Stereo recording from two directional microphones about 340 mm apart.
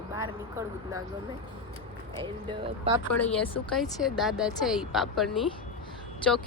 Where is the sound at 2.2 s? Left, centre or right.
Centre.